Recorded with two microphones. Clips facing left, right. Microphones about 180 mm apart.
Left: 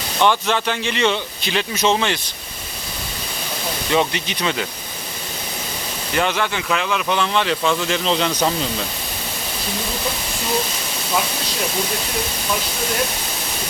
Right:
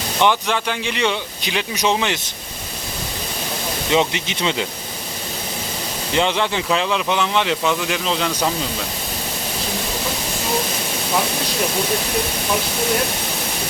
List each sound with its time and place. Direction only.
0.2 s speech: 15° right (ahead or behind)
3.9 s speech: 20° right (ahead or behind)
6.1 s speech: 25° right (ahead or behind)
7.1 s speech: 15° right (ahead or behind)